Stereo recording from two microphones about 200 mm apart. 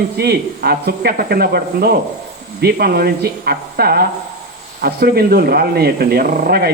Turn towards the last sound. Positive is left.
turn(degrees=-50)  # may be behind; listen again after turning